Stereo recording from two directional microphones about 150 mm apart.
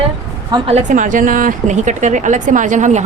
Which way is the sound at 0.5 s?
40° right (ahead or behind).